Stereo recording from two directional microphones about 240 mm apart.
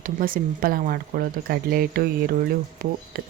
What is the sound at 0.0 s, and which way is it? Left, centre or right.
Speech, right.